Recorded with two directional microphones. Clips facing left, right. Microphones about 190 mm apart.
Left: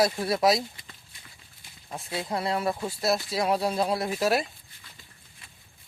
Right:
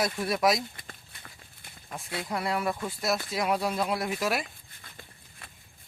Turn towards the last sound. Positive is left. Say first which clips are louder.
# left 4 dB
turn(degrees=30)  # may be behind; listen again after turning